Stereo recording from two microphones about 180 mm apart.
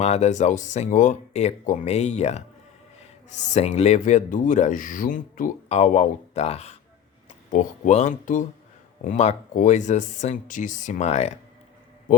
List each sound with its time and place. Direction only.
0.0 s speech: 40° left (ahead or behind)